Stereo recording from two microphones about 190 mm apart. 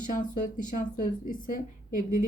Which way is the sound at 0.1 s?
45° left (ahead or behind).